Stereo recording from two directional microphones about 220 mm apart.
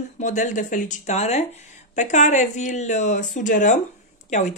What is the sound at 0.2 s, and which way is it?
Speech, 35° left (ahead or behind).